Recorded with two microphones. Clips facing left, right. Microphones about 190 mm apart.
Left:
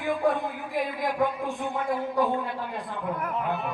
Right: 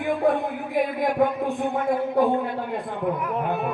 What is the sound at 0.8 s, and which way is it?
Speech, 55° right (ahead or behind).